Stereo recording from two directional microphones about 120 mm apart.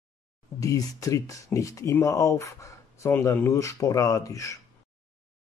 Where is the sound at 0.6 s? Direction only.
30° left (ahead or behind).